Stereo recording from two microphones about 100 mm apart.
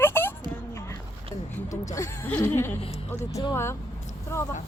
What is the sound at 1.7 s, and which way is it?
Speech, 30° left (ahead or behind).